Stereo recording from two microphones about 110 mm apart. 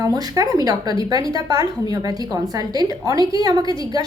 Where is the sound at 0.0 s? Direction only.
35° right (ahead or behind).